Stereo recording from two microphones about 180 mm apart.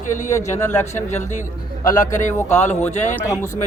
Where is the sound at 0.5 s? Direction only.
15° left (ahead or behind).